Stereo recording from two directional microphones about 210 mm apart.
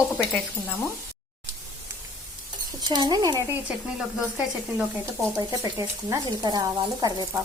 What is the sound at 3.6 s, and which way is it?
Sizzle, 5° right (ahead or behind).